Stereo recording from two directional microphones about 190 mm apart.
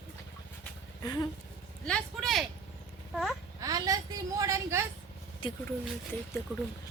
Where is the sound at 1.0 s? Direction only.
20° left (ahead or behind).